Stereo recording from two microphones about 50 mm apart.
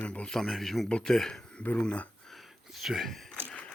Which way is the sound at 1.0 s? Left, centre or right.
Centre.